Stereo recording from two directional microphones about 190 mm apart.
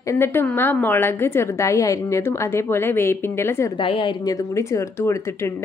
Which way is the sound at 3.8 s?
25° left (ahead or behind).